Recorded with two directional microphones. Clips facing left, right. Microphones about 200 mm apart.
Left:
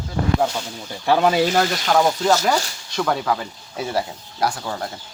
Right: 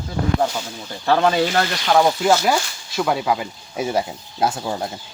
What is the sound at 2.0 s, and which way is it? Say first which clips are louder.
Speech: right 1 dB; 10° right (ahead or behind).